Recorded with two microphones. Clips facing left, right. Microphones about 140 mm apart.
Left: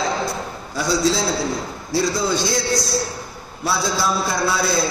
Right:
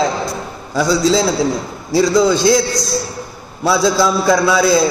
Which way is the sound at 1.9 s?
90° right.